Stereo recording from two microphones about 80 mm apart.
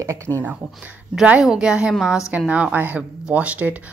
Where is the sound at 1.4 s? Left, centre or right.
Centre.